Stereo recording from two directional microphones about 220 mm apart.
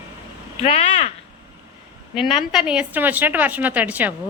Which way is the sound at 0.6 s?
25° left (ahead or behind).